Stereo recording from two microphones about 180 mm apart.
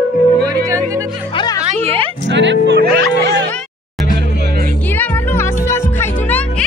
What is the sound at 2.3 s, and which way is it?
Music, 85° right.